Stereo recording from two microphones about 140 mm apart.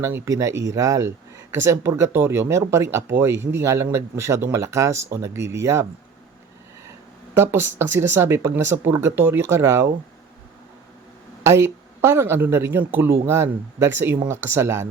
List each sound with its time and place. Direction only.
0.0 s speech: 20° right (ahead or behind)
7.3 s speech: 15° right (ahead or behind)
11.4 s speech: 20° right (ahead or behind)